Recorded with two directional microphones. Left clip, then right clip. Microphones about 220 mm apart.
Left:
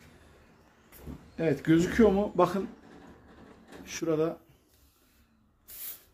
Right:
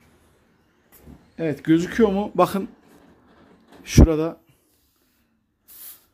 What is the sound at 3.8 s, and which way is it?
Speech, 50° right (ahead or behind).